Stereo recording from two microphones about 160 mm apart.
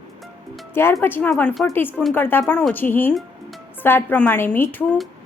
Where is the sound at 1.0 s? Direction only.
10° left (ahead or behind).